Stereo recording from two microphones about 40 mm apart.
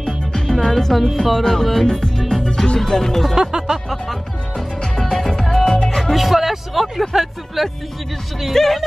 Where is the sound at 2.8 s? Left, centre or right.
Centre.